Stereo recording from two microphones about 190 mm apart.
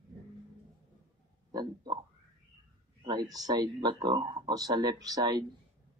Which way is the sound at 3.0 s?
20° right (ahead or behind).